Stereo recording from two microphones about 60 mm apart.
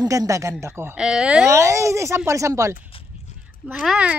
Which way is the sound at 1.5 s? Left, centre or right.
Right.